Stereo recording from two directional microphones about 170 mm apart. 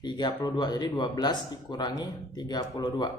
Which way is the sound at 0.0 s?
25° left (ahead or behind).